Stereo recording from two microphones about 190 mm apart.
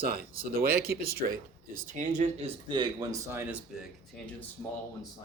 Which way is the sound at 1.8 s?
40° right (ahead or behind).